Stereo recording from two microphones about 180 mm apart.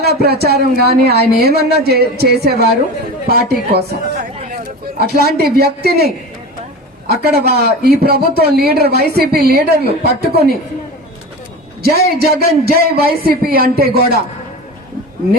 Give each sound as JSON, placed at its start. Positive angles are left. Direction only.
{"t": 0.0, "sound": "speech", "side_deg": -60}
{"t": 7.1, "sound": "speech", "side_deg": -60}
{"t": 11.8, "sound": "speech", "side_deg": -60}